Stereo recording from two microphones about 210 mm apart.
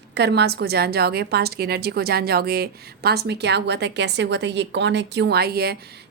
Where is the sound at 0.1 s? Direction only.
55° right (ahead or behind).